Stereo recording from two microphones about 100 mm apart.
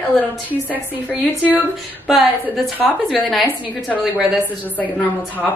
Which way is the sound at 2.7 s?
15° left (ahead or behind).